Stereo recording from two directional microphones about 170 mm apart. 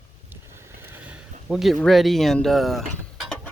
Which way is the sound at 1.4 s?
Centre (ahead or behind).